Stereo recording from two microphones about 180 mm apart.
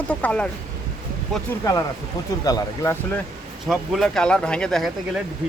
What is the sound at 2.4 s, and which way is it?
Speech, 20° left (ahead or behind).